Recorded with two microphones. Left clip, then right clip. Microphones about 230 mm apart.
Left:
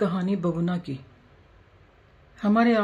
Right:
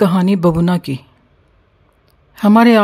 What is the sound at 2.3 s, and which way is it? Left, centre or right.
Speech, right.